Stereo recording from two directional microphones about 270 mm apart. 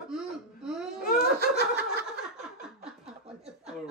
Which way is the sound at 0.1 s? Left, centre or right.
Centre.